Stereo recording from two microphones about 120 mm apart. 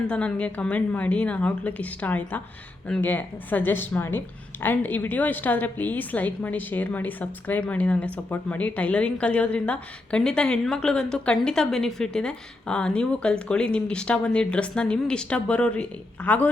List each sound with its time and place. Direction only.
0.1 s a woman's voice: 10° left (ahead or behind)